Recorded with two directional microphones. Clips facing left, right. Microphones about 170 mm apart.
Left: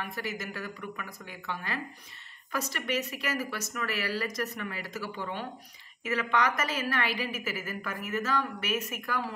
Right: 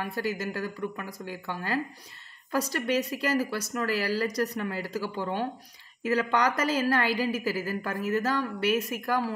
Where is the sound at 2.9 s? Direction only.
35° right (ahead or behind).